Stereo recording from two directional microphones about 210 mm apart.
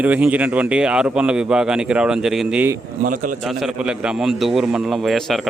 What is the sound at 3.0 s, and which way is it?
Speech, 40° right (ahead or behind).